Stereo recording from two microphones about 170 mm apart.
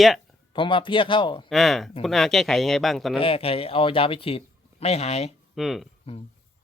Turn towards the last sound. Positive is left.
turn(degrees=0)  # may be behind; listen again after turning